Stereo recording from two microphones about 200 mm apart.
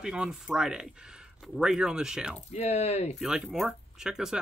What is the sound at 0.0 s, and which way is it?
Speech, 5° right (ahead or behind).